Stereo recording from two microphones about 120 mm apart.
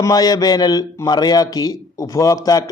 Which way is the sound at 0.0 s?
30° left (ahead or behind).